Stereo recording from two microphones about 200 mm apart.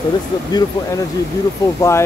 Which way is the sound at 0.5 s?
20° left (ahead or behind).